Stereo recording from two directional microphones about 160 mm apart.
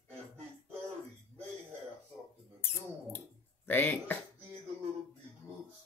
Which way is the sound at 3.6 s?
10° left (ahead or behind).